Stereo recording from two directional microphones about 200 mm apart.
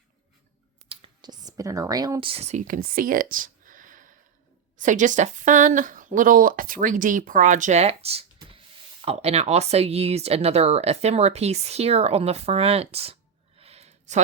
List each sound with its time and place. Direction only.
0.9 s clicking: 25° right (ahead or behind)
2.3 s speech: 35° right (ahead or behind)
13.6 s a sound: 30° right (ahead or behind)